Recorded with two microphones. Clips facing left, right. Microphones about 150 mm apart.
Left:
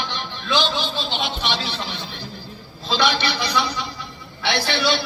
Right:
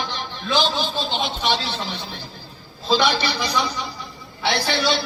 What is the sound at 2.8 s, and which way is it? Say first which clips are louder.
A man's voice: right 2 dB; 45° right (ahead or behind).